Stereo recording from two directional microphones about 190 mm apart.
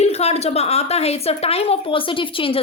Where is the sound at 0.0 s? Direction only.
35° left (ahead or behind).